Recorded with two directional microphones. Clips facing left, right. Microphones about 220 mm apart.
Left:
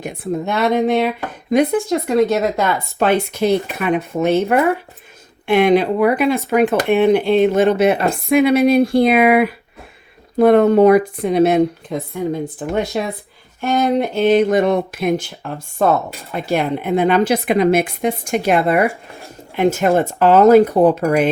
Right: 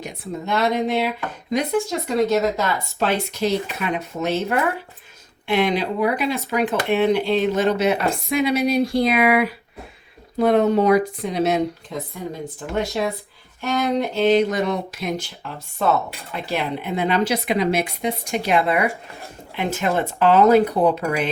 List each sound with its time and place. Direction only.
0.0 s speech: 55° left (ahead or behind)